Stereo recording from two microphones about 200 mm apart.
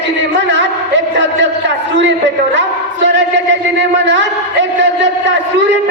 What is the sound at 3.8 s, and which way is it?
A man's voice, 65° right (ahead or behind).